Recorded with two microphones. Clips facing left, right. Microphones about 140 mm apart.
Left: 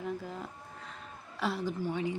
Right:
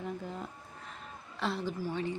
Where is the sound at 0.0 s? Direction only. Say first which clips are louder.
Left 1 dB; centre (ahead or behind).